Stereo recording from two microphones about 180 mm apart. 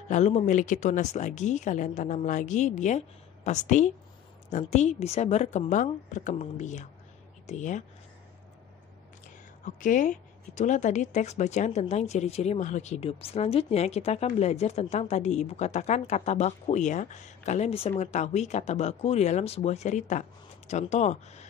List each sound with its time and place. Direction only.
0.1 s a woman's voice: 40° left (ahead or behind)
9.8 s speech: 45° left (ahead or behind)